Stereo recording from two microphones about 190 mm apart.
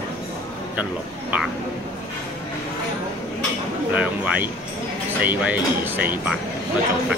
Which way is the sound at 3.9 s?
5° right (ahead or behind).